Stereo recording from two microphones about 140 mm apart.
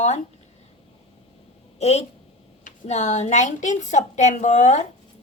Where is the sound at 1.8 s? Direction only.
50° left (ahead or behind).